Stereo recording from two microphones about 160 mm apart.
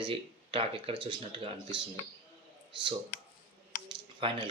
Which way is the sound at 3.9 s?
30° right (ahead or behind).